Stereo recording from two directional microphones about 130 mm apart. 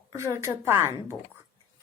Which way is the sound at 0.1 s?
25° right (ahead or behind).